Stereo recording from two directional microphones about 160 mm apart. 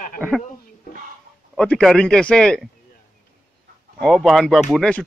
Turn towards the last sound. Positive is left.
turn(degrees=5)  # may be behind; listen again after turning